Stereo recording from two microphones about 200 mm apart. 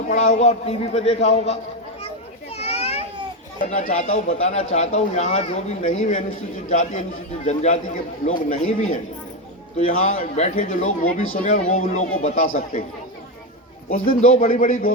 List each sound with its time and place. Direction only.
0.1 s speech: 40° left (ahead or behind)
2.6 s children playing: 30° left (ahead or behind)
3.6 s speech: 35° left (ahead or behind)
11.0 s speech: 90° left
11.7 s speech: 35° left (ahead or behind)
14.0 s speech: 30° left (ahead or behind)
14.3 s speech: 45° left (ahead or behind)